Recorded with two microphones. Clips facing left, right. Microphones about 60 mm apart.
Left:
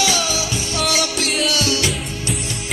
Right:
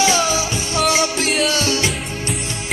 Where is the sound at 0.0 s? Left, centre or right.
Right.